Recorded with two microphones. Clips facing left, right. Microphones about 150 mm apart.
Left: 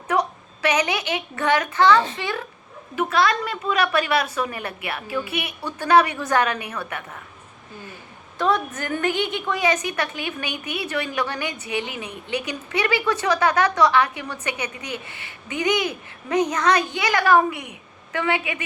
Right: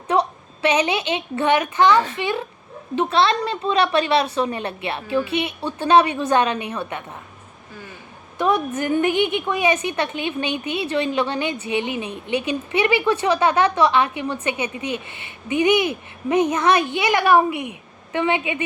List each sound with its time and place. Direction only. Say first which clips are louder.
0.6 s a woman's voice: right 3 dB; 25° right (ahead or behind)
8.4 s a woman's voice: right 2 dB; 15° right (ahead or behind)